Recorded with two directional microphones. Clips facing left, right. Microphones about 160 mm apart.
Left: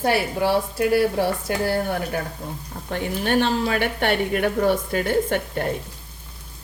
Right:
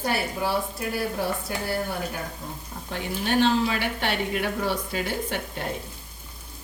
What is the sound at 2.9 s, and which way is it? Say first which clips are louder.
Speech: left 4 dB; 55° left (ahead or behind).